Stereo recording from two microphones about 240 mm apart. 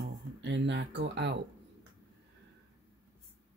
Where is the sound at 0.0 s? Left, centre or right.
Right.